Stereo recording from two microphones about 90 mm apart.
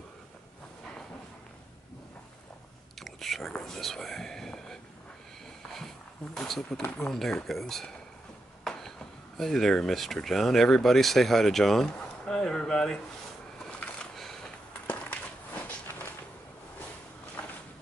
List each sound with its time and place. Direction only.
3.0 s speech: centre (ahead or behind)
6.3 s speech: 5° left (ahead or behind)
8.6 s a sound: 5° left (ahead or behind)
9.4 s speech: 5° left (ahead or behind)
13.6 s a sound: 15° left (ahead or behind)
14.9 s walk: 15° left (ahead or behind)